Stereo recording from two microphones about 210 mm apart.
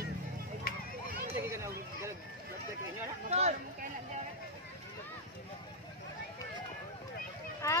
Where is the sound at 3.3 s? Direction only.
30° right (ahead or behind).